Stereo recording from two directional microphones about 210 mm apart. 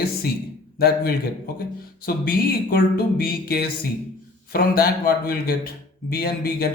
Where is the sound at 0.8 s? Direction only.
50° left (ahead or behind).